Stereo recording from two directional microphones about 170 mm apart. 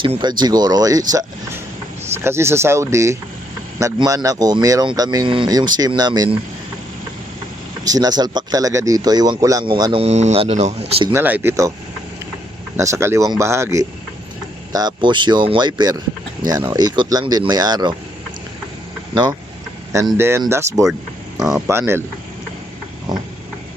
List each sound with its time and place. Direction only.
0.0 s speech: 30° right (ahead or behind)
7.9 s speech: 20° right (ahead or behind)
10.0 s speech: 40° right (ahead or behind)
11.1 s speech: 10° right (ahead or behind)
12.7 s speech: 15° right (ahead or behind)
20.1 s speech: 15° right (ahead or behind)
21.3 s speech: centre (ahead or behind)
21.7 s speech: 15° right (ahead or behind)